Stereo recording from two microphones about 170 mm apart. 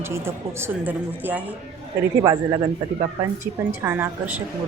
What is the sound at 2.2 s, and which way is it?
Speech, 25° right (ahead or behind).